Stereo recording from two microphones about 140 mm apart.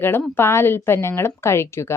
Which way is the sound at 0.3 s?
15° left (ahead or behind).